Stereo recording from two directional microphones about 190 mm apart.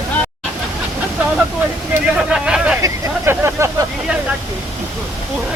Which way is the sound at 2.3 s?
5° right (ahead or behind).